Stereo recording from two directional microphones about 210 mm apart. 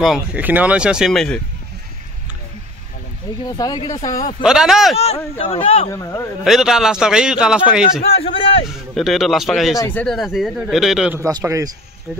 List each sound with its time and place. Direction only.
0.0 s speech: 5° right (ahead or behind)
3.4 s speech: 20° left (ahead or behind)
4.4 s speech: 5° right (ahead or behind)
4.9 s speech: 30° left (ahead or behind)
5.9 s speech: 15° left (ahead or behind)
6.4 s speech: centre (ahead or behind)
8.0 s a sound: 25° left (ahead or behind)
8.9 s speech: centre (ahead or behind)
11.2 s a man's voice: 15° right (ahead or behind)